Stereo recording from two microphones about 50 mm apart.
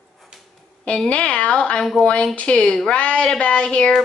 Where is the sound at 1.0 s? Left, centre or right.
Left.